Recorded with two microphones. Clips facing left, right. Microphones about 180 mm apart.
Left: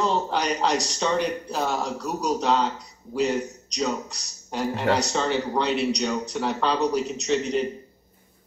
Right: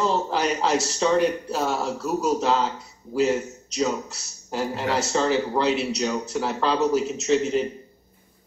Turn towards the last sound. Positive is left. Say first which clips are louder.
# right 2 dB
turn(degrees=0)  # may be behind; listen again after turning